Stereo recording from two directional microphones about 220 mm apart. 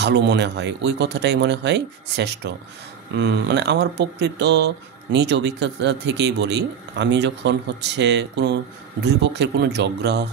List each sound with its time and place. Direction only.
0.0 s speech: 50° right (ahead or behind)